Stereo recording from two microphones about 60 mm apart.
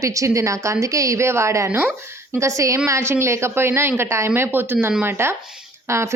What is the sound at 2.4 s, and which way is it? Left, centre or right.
Speech, right.